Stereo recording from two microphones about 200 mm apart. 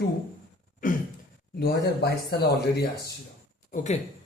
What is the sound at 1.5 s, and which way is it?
Speech, 55° left (ahead or behind).